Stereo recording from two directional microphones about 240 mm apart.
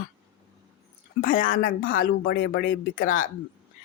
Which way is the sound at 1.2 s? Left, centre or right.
Left.